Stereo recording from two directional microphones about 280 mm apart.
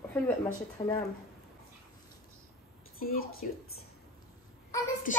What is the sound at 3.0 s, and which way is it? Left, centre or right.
Speech, left.